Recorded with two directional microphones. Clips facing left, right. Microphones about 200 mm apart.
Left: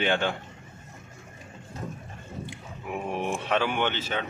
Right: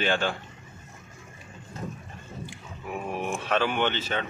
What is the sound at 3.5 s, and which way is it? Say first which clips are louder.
Speech: right 2 dB; 15° left (ahead or behind).